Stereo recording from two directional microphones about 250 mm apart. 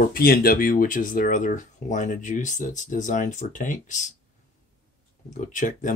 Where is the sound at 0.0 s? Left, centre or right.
Left.